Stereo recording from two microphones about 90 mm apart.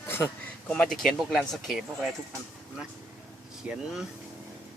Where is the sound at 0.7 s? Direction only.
10° left (ahead or behind).